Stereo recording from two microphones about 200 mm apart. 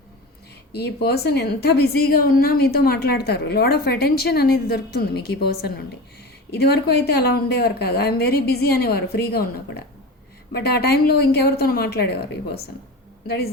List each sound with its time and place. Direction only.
0.7 s a woman's voice: 55° left (ahead or behind)